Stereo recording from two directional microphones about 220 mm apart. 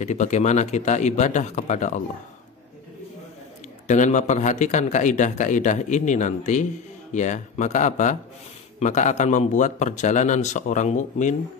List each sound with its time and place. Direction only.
0.0 s a man's voice: 35° left (ahead or behind)
3.8 s a man's voice: 35° left (ahead or behind)